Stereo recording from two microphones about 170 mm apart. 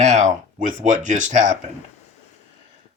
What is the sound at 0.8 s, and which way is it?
Speech, 45° right (ahead or behind).